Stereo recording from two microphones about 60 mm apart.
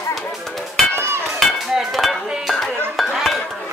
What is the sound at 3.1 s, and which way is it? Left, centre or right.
Music, centre.